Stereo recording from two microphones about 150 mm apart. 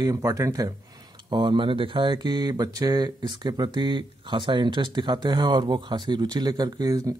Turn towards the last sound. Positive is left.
turn(degrees=-25)  # may be behind; listen again after turning